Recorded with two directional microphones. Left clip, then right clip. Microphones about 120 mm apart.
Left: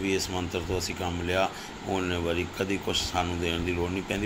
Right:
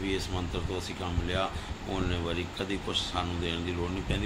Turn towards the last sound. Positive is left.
turn(degrees=30)  # may be behind; listen again after turning